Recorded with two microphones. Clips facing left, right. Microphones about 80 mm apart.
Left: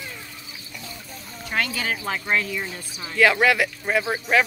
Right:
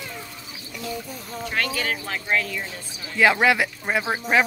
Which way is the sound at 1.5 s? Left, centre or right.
Centre.